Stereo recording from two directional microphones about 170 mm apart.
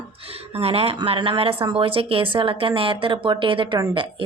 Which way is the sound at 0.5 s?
35° right (ahead or behind).